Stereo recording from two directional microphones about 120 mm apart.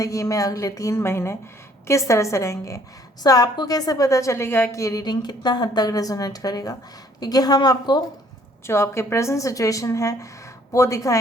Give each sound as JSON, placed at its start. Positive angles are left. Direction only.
{"t": 0.0, "sound": "a woman's voice", "side_deg": 25}
{"t": 8.6, "sound": "a woman's voice", "side_deg": 20}